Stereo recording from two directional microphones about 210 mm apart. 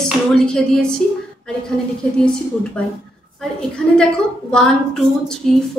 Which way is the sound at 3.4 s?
5° left (ahead or behind).